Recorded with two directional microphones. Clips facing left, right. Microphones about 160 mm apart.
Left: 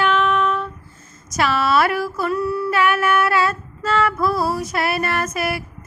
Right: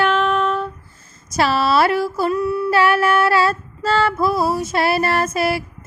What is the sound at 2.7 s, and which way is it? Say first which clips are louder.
Female singing: right 3 dB; 35° right (ahead or behind).